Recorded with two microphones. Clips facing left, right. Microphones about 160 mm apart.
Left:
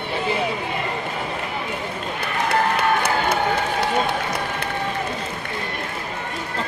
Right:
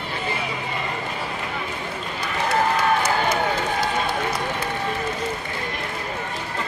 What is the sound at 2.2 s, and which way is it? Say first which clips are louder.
Crowd: even; 60° left (ahead or behind).